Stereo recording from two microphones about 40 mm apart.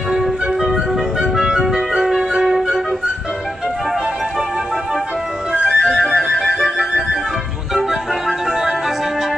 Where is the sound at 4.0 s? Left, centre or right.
Centre.